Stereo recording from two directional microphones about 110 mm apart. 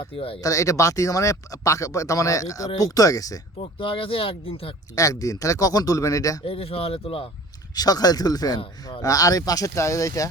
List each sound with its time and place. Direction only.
0.0 s speech: 55° left (ahead or behind)
0.4 s speech: 30° left (ahead or behind)
3.6 s speech: 55° left (ahead or behind)
4.9 s speech: 30° left (ahead or behind)
6.4 s speech: 60° left (ahead or behind)
7.8 s speech: 35° left (ahead or behind)